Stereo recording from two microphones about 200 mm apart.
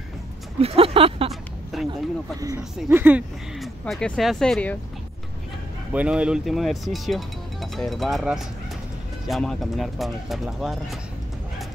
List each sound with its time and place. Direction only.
0.6 s speech: 30° right (ahead or behind)
1.3 s a sound: centre (ahead or behind)
2.4 s speech: 10° right (ahead or behind); by 4.7 s 5° left (ahead or behind)
5.9 s speech: 5° right (ahead or behind)